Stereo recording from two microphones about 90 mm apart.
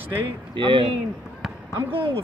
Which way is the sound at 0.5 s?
65° right (ahead or behind).